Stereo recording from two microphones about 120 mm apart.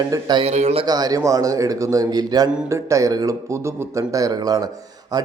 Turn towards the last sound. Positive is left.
turn(degrees=-35)  # may be behind; listen again after turning